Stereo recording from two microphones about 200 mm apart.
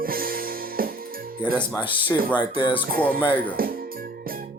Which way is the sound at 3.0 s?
5° left (ahead or behind).